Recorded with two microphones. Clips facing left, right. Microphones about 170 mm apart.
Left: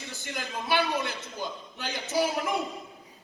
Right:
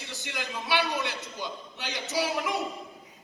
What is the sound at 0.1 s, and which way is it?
A man's voice, 50° left (ahead or behind).